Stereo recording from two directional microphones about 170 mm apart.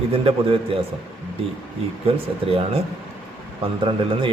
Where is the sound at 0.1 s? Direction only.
35° right (ahead or behind).